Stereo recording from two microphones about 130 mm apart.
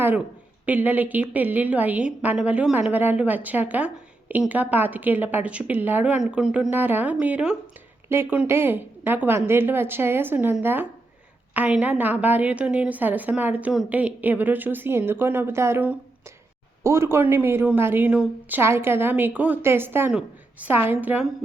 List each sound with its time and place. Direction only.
0.6 s a woman's voice: 15° right (ahead or behind)